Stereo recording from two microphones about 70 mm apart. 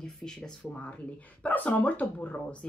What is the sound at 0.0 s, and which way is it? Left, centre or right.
Speech, centre.